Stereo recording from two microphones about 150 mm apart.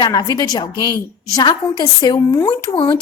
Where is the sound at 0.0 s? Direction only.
25° left (ahead or behind).